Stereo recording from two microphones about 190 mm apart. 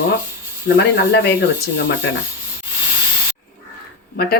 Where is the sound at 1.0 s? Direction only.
60° left (ahead or behind).